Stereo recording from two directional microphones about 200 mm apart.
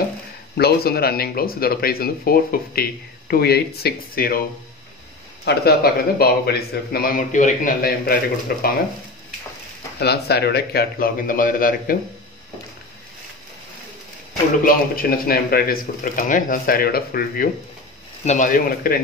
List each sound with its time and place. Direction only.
0.6 s speech: 50° left (ahead or behind)
5.4 s speech: 55° left (ahead or behind)
9.9 s speech: 55° left (ahead or behind)
14.6 s speech: 45° left (ahead or behind)
18.2 s speech: 35° left (ahead or behind)